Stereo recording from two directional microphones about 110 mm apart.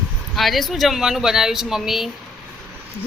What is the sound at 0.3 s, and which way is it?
Speech, centre (ahead or behind).